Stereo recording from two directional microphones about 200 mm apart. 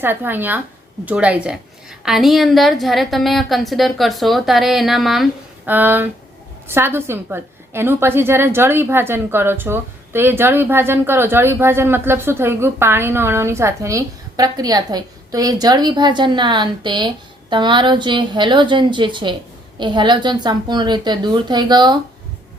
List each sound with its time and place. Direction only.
0.0 s a woman's voice: 10° right (ahead or behind)